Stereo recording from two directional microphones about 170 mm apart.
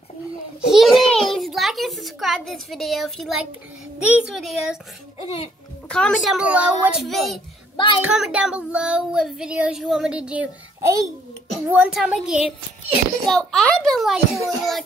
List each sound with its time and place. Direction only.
0.7 s a child's voice: centre (ahead or behind)
4.1 s child singing: centre (ahead or behind)
5.9 s a woman's voice: 5° left (ahead or behind)
6.2 s child singing: 5° right (ahead or behind)
7.7 s a child's voice: 30° left (ahead or behind)
8.0 s child singing: 5° right (ahead or behind)